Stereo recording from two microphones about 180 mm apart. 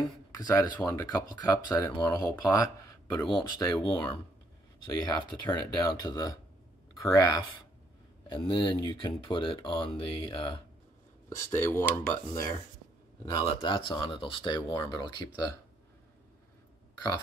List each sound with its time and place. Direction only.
0.3 s speech: 20° left (ahead or behind)
5.0 s speech: 20° left (ahead or behind)
11.2 s speech: 15° left (ahead or behind)
13.2 s speech: 25° left (ahead or behind)